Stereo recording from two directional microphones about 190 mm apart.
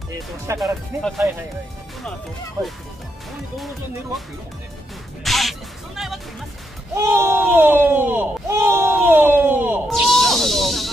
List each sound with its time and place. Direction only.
0.6 s speech: centre (ahead or behind)
2.6 s speech: 20° right (ahead or behind)
5.2 s music: centre (ahead or behind)
7.0 s speech: 15° right (ahead or behind)
9.8 s a sound: centre (ahead or behind)